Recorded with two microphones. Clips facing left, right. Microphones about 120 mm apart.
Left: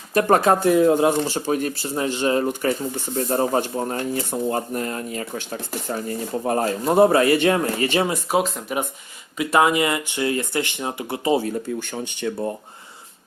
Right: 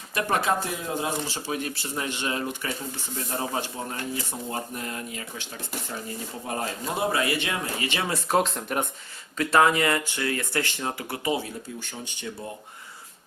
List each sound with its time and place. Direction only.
0.1 s speech: 45° left (ahead or behind)
1.5 s speech: 40° left (ahead or behind)
8.0 s speech: 10° left (ahead or behind)
9.4 s speech: 15° left (ahead or behind)
11.8 s speech: 65° left (ahead or behind)